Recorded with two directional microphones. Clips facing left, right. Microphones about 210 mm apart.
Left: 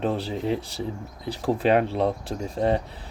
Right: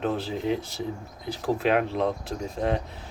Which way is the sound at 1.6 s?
35° left (ahead or behind).